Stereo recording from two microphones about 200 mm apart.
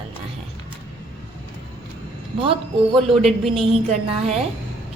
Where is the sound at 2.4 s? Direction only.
25° right (ahead or behind).